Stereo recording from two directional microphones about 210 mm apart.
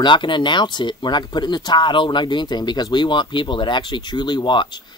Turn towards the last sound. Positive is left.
turn(degrees=20)  # may be behind; listen again after turning